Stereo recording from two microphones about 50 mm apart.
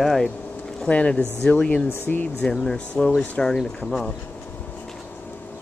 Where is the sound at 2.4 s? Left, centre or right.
Centre.